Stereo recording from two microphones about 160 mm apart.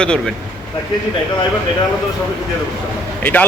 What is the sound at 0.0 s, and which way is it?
Speech, 5° left (ahead or behind).